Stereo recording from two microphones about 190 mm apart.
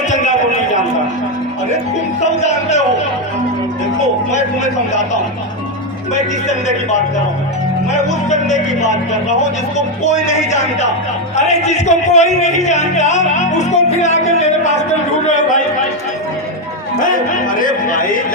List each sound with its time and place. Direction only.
2.2 s music: 35° left (ahead or behind)
7.9 s a man's voice: 40° left (ahead or behind)
15.3 s a sound: 40° left (ahead or behind)
17.0 s speech: 45° left (ahead or behind)